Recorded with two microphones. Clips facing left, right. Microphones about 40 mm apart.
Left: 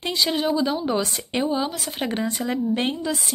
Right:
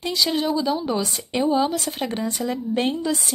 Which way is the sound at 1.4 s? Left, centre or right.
Centre.